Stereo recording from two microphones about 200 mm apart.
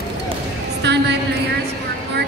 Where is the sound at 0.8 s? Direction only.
60° right (ahead or behind).